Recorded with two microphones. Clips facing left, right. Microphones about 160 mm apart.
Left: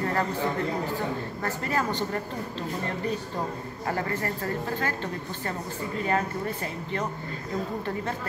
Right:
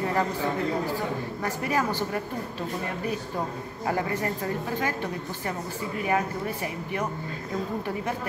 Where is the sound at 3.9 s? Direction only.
15° right (ahead or behind).